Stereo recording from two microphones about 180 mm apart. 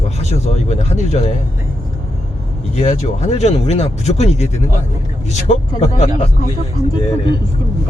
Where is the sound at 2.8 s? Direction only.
40° left (ahead or behind).